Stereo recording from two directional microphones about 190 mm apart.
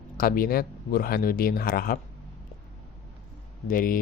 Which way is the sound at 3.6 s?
45° left (ahead or behind).